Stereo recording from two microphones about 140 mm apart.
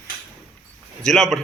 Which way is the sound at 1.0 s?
5° left (ahead or behind).